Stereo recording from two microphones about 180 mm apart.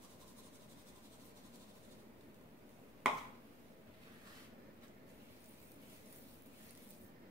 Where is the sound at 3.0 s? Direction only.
5° right (ahead or behind).